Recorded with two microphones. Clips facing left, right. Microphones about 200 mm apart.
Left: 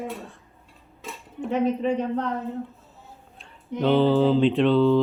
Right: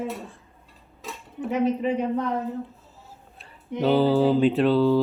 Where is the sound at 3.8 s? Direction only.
5° right (ahead or behind).